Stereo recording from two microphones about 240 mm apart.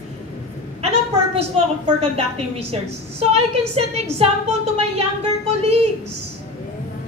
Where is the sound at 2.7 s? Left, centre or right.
Right.